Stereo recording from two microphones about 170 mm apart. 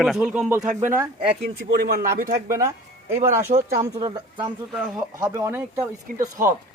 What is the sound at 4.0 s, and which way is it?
Speech, 30° right (ahead or behind).